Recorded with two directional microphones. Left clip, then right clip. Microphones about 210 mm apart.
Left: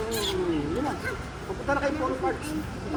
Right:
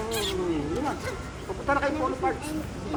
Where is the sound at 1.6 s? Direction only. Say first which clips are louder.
Right 1 dB; centre (ahead or behind).